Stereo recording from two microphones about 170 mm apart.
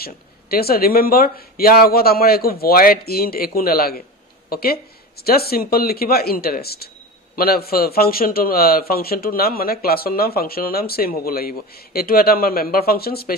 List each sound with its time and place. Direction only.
0.0 s a man's voice: 65° left (ahead or behind)